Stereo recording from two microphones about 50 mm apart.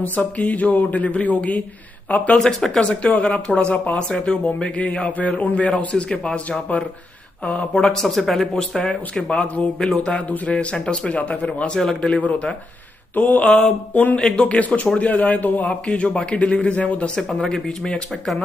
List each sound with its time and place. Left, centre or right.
0.0 s speech: left
2.3 s a man's voice: centre
7.7 s a man's voice: centre
8.5 s a man's voice: centre
10.3 s a man's voice: left
11.7 s a man's voice: centre
13.1 s speech: left
13.4 s a man's voice: centre
13.9 s a man's voice: left
15.9 s a man's voice: centre
17.2 s a man's voice: centre